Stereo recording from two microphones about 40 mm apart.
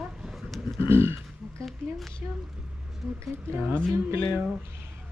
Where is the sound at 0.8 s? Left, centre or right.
Right.